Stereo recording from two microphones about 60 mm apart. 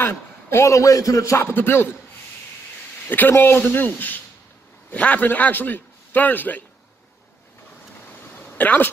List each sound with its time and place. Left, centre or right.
0.0 s a man's voice: left
1.5 s speech: left
3.1 s a man's voice: left
8.5 s speech: left